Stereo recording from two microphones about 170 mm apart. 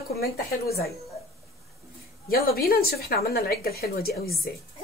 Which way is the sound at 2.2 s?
60° left (ahead or behind).